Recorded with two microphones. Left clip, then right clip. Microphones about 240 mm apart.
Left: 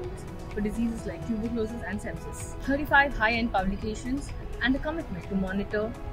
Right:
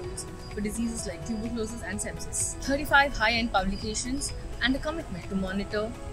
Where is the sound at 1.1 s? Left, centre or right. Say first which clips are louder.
Left 1 dB; centre.